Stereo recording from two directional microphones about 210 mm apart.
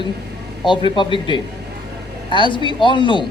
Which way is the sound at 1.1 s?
25° left (ahead or behind).